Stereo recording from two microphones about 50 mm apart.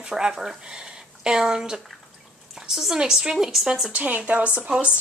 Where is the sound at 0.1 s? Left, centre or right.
Centre.